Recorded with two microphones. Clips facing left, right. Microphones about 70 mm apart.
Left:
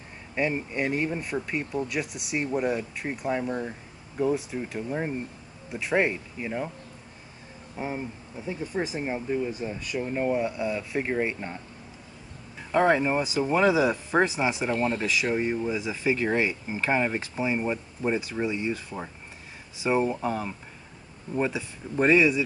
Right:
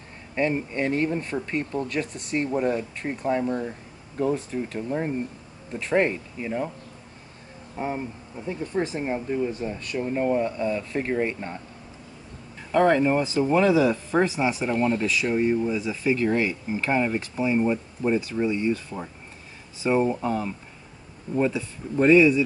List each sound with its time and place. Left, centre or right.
0.3 s speech: centre
7.7 s speech: centre
12.7 s speech: centre
14.7 s speech: centre
15.0 s speech: centre